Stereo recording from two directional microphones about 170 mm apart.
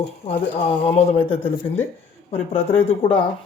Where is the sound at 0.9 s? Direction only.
35° left (ahead or behind).